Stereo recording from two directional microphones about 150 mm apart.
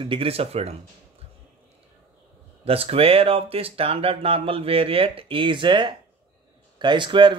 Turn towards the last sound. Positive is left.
turn(degrees=-30)  # may be behind; listen again after turning